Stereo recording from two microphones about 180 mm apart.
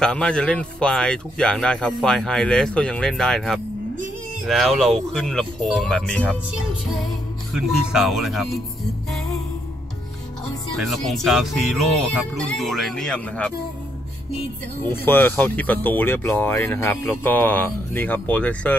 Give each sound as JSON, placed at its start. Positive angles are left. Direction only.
{"t": 0.0, "sound": "speech", "side_deg": 5}
{"t": 10.8, "sound": "speech", "side_deg": 0}
{"t": 14.8, "sound": "speech", "side_deg": 10}